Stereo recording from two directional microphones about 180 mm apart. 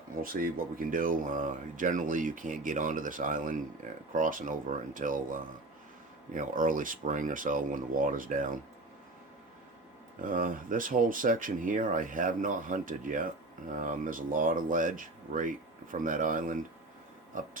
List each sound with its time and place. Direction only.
0.2 s speech: 50° right (ahead or behind)
10.2 s speech: 50° right (ahead or behind)